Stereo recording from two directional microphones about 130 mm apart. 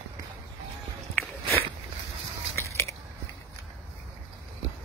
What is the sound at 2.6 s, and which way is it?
Biting, 20° left (ahead or behind).